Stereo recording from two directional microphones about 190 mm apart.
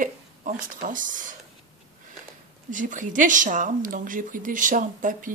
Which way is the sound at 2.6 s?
45° right (ahead or behind).